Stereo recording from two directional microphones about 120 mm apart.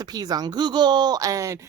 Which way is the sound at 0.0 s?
35° right (ahead or behind).